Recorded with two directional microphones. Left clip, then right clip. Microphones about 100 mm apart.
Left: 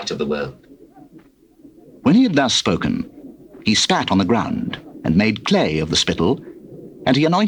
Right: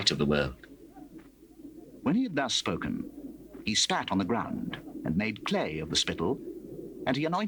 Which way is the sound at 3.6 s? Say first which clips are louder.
Left 11 dB; 30° left (ahead or behind).